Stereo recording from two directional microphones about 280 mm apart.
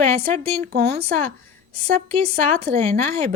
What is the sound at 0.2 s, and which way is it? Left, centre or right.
Speech, right.